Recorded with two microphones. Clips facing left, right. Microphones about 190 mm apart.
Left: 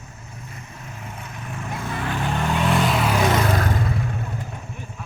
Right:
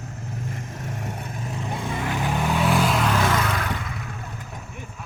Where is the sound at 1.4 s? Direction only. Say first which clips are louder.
Even; 25° right (ahead or behind); by 3.1 s centre (ahead or behind).